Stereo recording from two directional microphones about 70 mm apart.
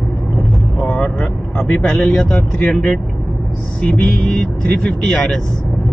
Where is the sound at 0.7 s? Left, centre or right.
Centre.